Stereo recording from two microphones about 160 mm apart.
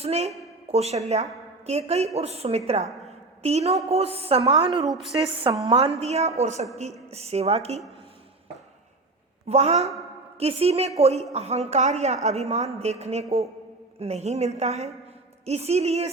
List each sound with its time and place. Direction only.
0.0 s music: 40° right (ahead or behind)
0.7 s a woman's voice: 40° right (ahead or behind)
2.1 s music: 40° right (ahead or behind)
3.1 s a sound: 40° right (ahead or behind)
3.8 s music: 40° right (ahead or behind)
4.9 s a woman's voice: centre (ahead or behind)
5.3 s music: 35° right (ahead or behind)
6.0 s a woman's voice: 45° right (ahead or behind)
7.1 s music: 40° right (ahead or behind)
9.5 s a woman's voice: 45° right (ahead or behind)
10.4 s music: 40° right (ahead or behind)
11.3 s a woman's voice: 40° right (ahead or behind)
15.4 s music: 40° right (ahead or behind)